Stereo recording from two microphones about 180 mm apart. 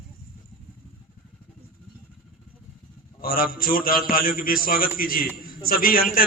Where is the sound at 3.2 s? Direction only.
55° left (ahead or behind).